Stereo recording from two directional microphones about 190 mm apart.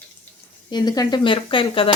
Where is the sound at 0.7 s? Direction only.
20° left (ahead or behind).